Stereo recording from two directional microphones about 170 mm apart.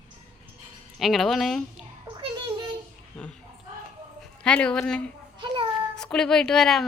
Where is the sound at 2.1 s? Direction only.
30° right (ahead or behind).